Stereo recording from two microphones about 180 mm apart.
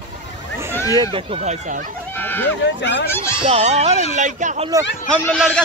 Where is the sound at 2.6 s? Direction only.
75° left (ahead or behind).